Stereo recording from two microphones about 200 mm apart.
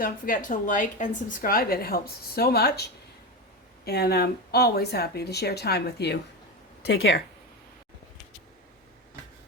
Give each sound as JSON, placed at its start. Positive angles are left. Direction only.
{"t": 0.0, "sound": "a woman's voice", "side_deg": 45}
{"t": 6.8, "sound": "speech", "side_deg": 70}